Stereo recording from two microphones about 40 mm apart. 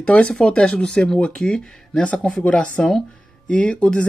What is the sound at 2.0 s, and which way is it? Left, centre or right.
Speech, left.